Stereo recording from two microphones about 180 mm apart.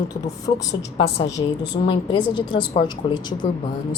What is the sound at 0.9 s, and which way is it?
A woman's voice, 35° left (ahead or behind).